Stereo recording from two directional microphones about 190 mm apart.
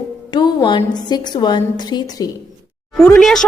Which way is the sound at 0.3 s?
25° left (ahead or behind).